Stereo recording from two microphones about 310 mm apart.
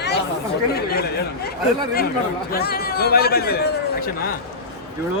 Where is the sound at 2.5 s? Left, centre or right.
Left.